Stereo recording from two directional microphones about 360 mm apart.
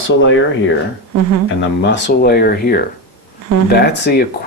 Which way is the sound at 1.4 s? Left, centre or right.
Left.